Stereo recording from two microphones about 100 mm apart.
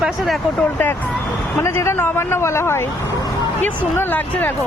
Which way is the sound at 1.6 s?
25° left (ahead or behind).